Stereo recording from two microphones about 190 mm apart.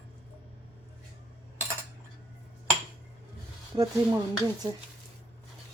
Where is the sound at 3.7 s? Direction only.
20° right (ahead or behind).